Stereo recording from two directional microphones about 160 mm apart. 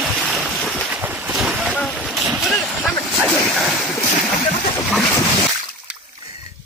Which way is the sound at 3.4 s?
Centre (ahead or behind).